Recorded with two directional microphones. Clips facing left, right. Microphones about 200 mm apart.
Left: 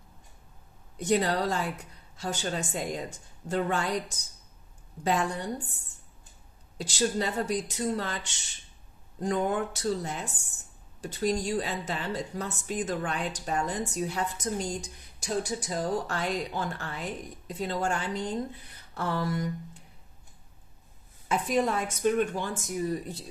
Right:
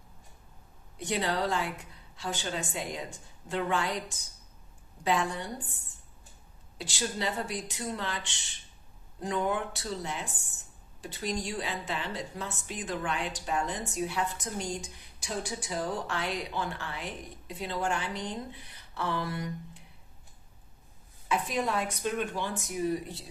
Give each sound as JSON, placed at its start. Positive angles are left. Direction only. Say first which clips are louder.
{"t": 0.9, "sound": "a woman's voice", "louder": "left 5 dB", "side_deg": 40}
{"t": 6.8, "sound": "a woman's voice", "louder": "left 5 dB", "side_deg": 40}
{"t": 18.5, "sound": "a sound", "louder": "left 1 dB", "side_deg": 45}
{"t": 21.3, "sound": "a woman's voice", "louder": "left 3 dB", "side_deg": 45}